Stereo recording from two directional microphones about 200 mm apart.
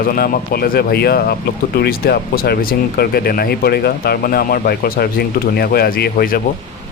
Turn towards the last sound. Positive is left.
turn(degrees=50)  # may be behind; listen again after turning